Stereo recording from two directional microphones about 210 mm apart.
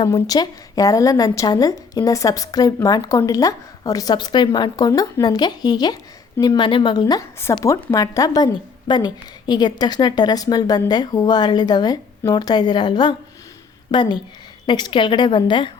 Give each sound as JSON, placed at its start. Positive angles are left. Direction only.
{"t": 0.0, "sound": "a woman's voice", "side_deg": 20}